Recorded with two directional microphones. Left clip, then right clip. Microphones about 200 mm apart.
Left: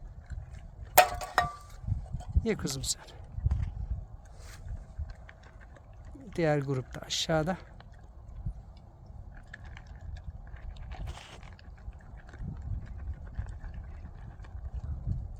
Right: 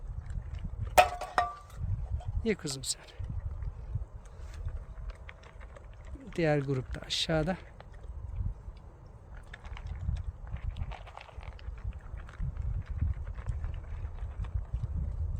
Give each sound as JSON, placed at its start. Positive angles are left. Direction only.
{"t": 0.9, "sound": "a sound", "side_deg": 45}
{"t": 2.4, "sound": "speech", "side_deg": -5}
{"t": 6.2, "sound": "speech", "side_deg": -5}
{"t": 9.5, "sound": "typing", "side_deg": 0}
{"t": 10.5, "sound": "a sound", "side_deg": 0}
{"t": 13.3, "sound": "vehicle", "side_deg": 5}